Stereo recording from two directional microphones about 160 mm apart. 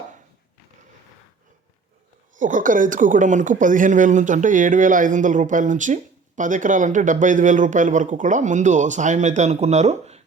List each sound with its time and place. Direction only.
2.3 s a woman's voice: 55° right (ahead or behind)